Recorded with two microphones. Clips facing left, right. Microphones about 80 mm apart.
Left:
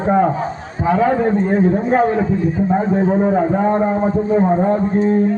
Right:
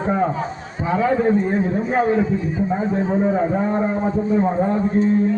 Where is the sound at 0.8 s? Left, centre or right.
Left.